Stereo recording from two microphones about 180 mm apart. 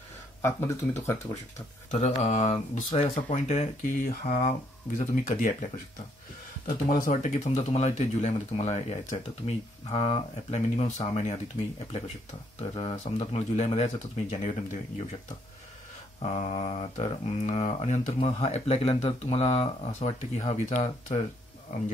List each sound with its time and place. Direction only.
0.4 s speech: 15° left (ahead or behind)
1.9 s speech: 40° left (ahead or behind)
7.1 s speech: 40° left (ahead or behind)
12.5 s speech: 35° left (ahead or behind)
16.2 s speech: 35° left (ahead or behind)